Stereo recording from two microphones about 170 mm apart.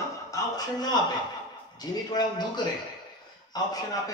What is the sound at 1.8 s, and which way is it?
A man's voice, 25° left (ahead or behind).